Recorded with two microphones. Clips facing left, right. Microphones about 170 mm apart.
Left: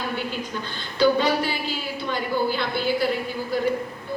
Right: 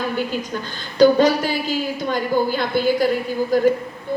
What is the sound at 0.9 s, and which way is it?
A woman's voice, 45° right (ahead or behind).